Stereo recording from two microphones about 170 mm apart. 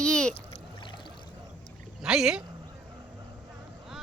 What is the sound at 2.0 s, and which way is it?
Speech, 5° right (ahead or behind).